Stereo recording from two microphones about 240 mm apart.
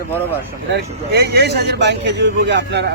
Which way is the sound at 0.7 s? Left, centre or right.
Right.